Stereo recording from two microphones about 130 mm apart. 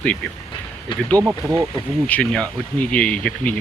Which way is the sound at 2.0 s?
10° left (ahead or behind).